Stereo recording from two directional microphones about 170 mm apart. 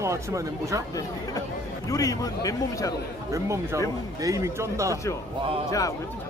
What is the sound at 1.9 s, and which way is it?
A man's voice, 20° left (ahead or behind).